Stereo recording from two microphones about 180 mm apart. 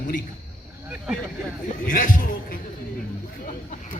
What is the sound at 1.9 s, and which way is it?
Speech, 50° left (ahead or behind).